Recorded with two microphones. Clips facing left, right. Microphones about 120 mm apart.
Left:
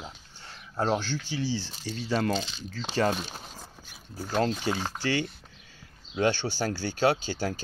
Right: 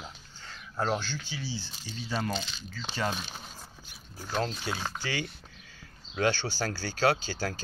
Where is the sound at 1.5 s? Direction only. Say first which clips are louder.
Left 7 dB; 90° left.